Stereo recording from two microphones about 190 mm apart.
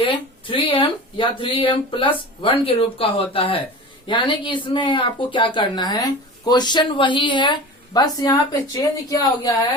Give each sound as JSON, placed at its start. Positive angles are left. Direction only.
{"t": 0.0, "sound": "speech", "side_deg": 25}